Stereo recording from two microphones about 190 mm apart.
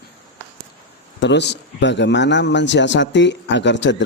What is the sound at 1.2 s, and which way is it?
A man's voice, 70° left (ahead or behind).